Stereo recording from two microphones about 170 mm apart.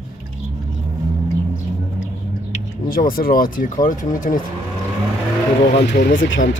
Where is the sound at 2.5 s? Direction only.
55° left (ahead or behind).